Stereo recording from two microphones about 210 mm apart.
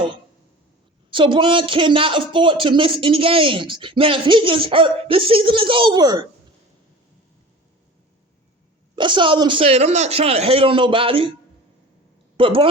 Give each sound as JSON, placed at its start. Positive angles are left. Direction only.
{"t": 1.1, "sound": "speech", "side_deg": -25}
{"t": 9.0, "sound": "speech", "side_deg": -20}
{"t": 12.4, "sound": "speech", "side_deg": -25}